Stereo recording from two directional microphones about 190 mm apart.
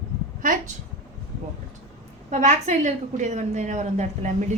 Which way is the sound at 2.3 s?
40° right (ahead or behind).